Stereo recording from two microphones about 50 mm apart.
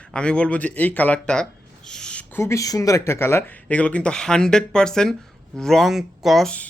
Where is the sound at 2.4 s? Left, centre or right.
Left.